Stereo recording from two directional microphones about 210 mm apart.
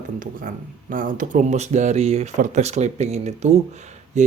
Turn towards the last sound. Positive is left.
turn(degrees=-35)  # may be behind; listen again after turning